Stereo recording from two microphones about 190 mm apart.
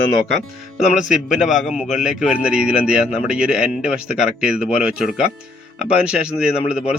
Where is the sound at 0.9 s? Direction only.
5° right (ahead or behind).